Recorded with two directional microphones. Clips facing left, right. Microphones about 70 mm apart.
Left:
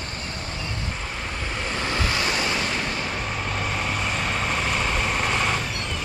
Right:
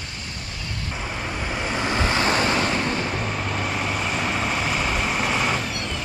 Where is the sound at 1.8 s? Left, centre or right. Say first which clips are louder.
Right 4 dB; right.